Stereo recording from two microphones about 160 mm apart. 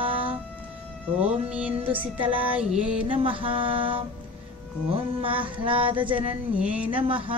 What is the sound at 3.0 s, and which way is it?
Speech, 35° right (ahead or behind).